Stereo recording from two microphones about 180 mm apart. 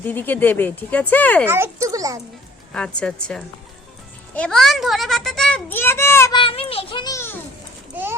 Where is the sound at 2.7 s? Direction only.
5° left (ahead or behind).